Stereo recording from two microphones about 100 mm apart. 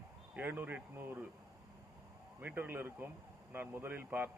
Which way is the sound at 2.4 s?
20° right (ahead or behind).